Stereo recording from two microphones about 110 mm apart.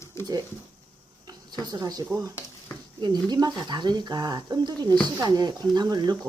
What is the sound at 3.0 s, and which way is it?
Speech, 40° right (ahead or behind).